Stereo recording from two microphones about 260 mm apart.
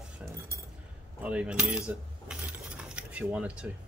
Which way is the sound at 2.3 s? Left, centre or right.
Centre.